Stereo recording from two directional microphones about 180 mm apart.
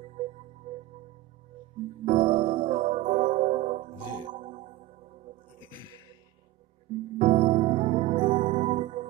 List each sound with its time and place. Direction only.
0.0 s music: 35° right (ahead or behind)
2.0 s music: 30° right (ahead or behind)
7.2 s music: 30° right (ahead or behind)